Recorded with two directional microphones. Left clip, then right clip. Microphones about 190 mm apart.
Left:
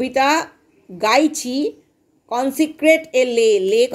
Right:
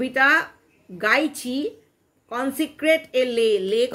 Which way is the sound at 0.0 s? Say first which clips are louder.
Left 2 dB; 15° left (ahead or behind).